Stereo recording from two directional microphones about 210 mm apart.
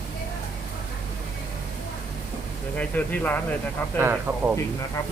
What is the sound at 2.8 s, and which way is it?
Speech, 10° left (ahead or behind).